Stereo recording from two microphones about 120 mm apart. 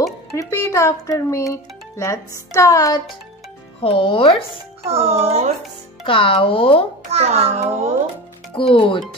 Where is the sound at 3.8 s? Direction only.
50° left (ahead or behind).